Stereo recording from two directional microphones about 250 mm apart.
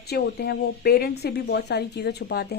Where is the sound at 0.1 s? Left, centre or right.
Left.